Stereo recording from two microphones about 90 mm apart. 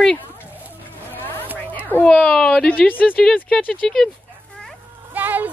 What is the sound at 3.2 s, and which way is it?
Speech, 5° left (ahead or behind).